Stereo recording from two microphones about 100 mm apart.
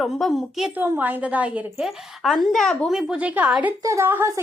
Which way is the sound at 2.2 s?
Centre (ahead or behind).